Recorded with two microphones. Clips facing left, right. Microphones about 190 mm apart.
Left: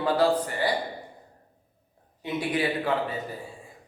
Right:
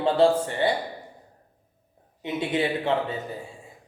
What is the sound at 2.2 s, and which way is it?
Speech, 25° right (ahead or behind).